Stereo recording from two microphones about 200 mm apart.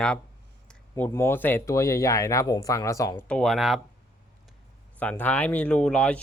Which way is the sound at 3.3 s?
Centre (ahead or behind).